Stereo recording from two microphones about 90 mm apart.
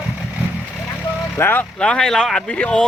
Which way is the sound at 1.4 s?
25° left (ahead or behind).